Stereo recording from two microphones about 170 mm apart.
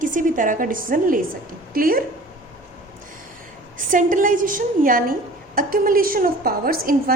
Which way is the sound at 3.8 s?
50° right (ahead or behind).